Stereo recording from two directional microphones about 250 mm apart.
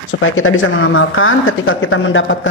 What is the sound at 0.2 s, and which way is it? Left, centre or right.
Speech, left.